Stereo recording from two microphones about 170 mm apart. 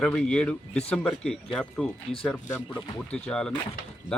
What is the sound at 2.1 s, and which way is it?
Speech, 40° left (ahead or behind).